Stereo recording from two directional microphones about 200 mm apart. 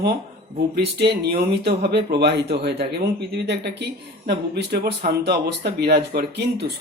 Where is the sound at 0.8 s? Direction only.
55° right (ahead or behind).